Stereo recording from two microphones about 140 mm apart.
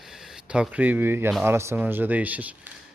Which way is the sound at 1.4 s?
15° right (ahead or behind).